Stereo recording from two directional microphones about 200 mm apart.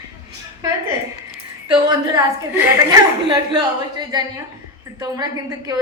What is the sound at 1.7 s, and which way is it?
A woman's voice, 20° right (ahead or behind).